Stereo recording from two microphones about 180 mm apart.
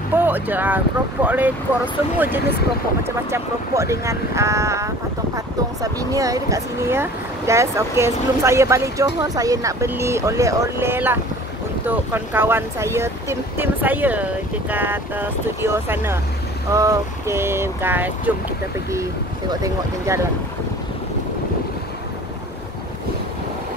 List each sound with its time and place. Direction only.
0.1 s speech: 10° right (ahead or behind)
20.1 s speech: 15° right (ahead or behind)